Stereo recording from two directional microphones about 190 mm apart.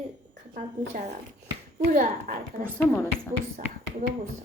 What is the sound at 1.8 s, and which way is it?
Speech, 45° right (ahead or behind).